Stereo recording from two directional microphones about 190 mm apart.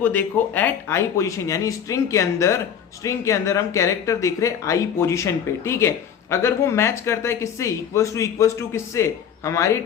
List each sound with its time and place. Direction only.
0.0 s speech: 10° left (ahead or behind)